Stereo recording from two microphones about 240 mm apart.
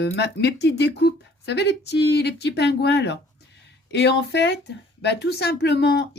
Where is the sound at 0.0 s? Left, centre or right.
Left.